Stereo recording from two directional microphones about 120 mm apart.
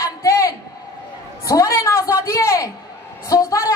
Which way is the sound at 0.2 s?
25° left (ahead or behind).